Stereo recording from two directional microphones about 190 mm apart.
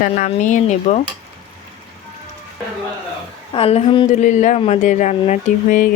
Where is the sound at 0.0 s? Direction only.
40° left (ahead or behind).